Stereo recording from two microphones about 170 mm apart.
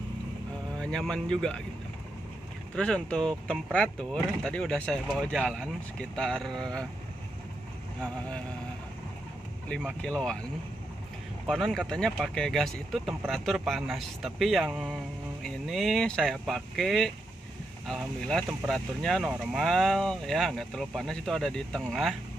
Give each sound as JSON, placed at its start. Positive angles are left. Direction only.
{"t": 0.7, "sound": "speech", "side_deg": 5}
{"t": 2.7, "sound": "speech", "side_deg": 5}
{"t": 10.0, "sound": "speech", "side_deg": 5}
{"t": 11.4, "sound": "speech", "side_deg": 0}